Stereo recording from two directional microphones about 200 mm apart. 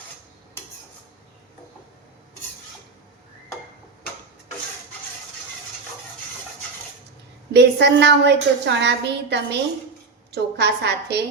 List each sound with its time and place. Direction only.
7.5 s a woman's voice: 60° right (ahead or behind)